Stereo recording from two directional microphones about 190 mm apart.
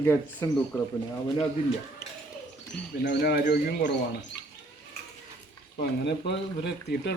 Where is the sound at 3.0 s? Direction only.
50° left (ahead or behind).